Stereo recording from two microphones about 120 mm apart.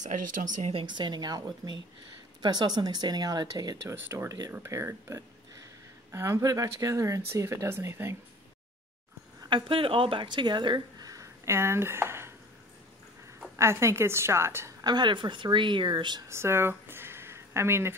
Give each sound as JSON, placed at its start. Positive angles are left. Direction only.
{"t": 0.0, "sound": "speech", "side_deg": -90}
{"t": 0.7, "sound": "a woman's voice", "side_deg": -40}
{"t": 3.9, "sound": "speech", "side_deg": -25}
{"t": 9.4, "sound": "speech", "side_deg": -45}
{"t": 13.6, "sound": "speech", "side_deg": -25}
{"t": 14.9, "sound": "a woman's voice", "side_deg": -40}
{"t": 16.3, "sound": "a sound", "side_deg": -20}